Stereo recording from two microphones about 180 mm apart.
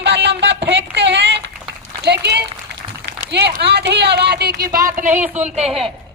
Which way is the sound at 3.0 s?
70° right (ahead or behind).